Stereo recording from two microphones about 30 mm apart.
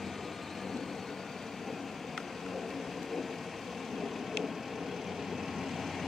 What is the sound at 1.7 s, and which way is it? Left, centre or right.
Vehicle, centre.